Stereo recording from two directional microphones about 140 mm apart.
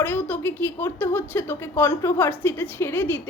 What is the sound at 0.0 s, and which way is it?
A woman's voice, 15° left (ahead or behind).